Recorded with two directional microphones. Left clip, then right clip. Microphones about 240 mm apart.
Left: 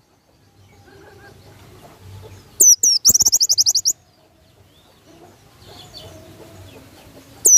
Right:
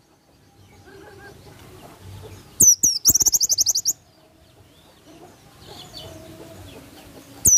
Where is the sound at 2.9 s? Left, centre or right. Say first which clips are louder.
Left 4 dB; left.